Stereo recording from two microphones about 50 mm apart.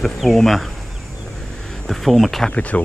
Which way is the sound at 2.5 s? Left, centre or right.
Left.